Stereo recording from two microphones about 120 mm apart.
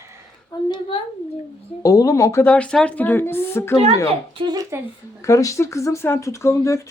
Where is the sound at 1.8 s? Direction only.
25° left (ahead or behind).